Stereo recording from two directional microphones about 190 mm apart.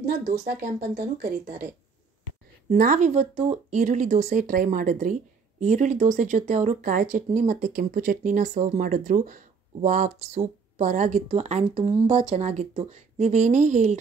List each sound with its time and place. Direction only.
0.0 s speech: 50° right (ahead or behind)
2.7 s speech: 45° right (ahead or behind)